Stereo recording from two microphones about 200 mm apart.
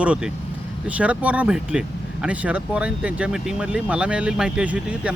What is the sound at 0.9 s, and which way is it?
Speech, 5° right (ahead or behind).